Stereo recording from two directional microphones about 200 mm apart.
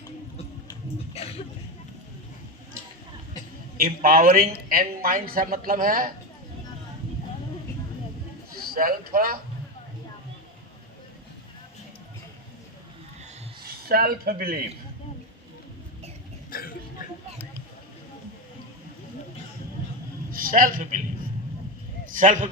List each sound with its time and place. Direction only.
3.8 s a woman's voice: 45° right (ahead or behind)
8.7 s a woman's voice: 45° right (ahead or behind)
13.8 s a woman's voice: 45° right (ahead or behind)
16.5 s cough: 45° left (ahead or behind)
20.3 s a man's voice: 45° right (ahead or behind)
22.1 s speech: 40° right (ahead or behind)